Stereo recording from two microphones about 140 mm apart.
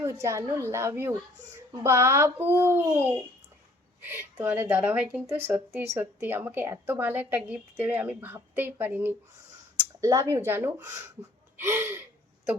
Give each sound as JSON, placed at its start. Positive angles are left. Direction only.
{"t": 0.0, "sound": "a woman's voice", "side_deg": -20}